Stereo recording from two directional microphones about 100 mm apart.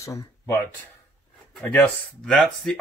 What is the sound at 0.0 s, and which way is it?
Speech, 30° left (ahead or behind).